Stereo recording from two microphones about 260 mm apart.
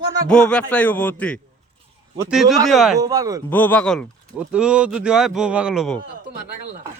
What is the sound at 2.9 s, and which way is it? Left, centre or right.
Speech, centre.